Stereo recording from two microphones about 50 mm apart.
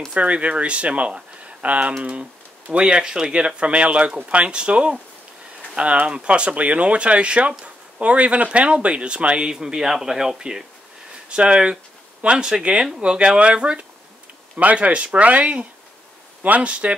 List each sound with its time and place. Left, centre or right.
0.1 s speech: right